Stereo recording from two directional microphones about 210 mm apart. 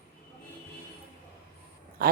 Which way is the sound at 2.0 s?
45° right (ahead or behind).